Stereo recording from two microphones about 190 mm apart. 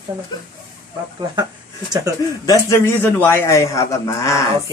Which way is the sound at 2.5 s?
15° left (ahead or behind).